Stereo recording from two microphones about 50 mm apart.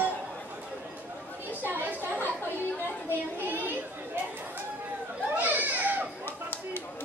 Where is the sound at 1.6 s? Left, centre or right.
Right.